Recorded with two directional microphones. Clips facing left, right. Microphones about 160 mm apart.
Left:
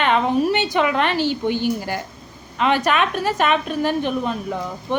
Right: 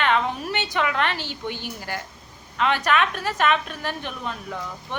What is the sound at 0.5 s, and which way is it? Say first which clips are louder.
A woman's voice: left 6 dB; 15° left (ahead or behind).